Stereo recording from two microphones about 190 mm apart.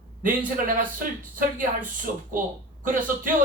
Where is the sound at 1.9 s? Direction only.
45° right (ahead or behind).